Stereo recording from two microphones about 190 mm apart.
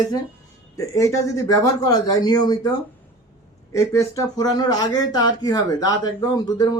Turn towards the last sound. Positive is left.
turn(degrees=20)  # may be behind; listen again after turning